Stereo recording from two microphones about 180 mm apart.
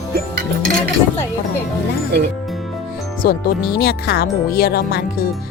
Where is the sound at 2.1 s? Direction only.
65° right (ahead or behind).